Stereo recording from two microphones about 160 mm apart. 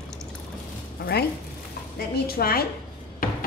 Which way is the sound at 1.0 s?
65° left (ahead or behind).